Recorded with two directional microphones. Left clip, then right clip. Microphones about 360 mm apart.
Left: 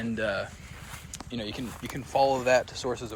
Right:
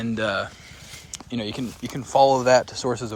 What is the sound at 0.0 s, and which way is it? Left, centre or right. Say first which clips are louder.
Speech: right 5 dB; centre.